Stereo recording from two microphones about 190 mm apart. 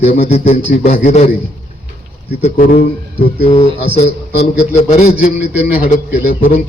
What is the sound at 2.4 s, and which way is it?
Speech, 35° left (ahead or behind).